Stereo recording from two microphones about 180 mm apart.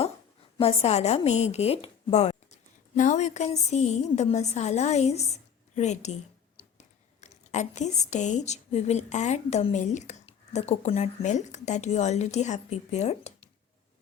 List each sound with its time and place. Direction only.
0.6 s a woman's voice: 35° left (ahead or behind)